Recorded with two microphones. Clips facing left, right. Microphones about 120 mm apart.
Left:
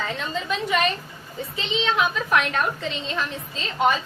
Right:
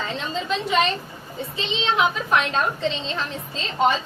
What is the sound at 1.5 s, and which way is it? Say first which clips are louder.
A woman's voice: right 1 dB; 25° right (ahead or behind).